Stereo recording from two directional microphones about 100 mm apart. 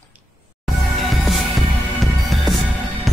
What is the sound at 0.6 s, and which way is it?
Music, centre (ahead or behind).